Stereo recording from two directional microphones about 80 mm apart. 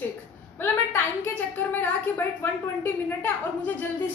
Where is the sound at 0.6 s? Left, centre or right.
Left.